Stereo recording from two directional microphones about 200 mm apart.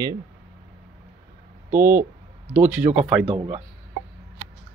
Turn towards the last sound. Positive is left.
turn(degrees=-5)  # may be behind; listen again after turning